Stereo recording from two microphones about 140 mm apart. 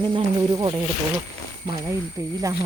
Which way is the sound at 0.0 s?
30° right (ahead or behind).